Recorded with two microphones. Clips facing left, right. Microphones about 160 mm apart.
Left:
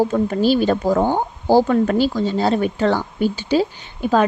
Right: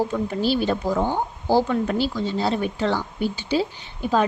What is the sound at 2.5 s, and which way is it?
Speech, 70° left (ahead or behind).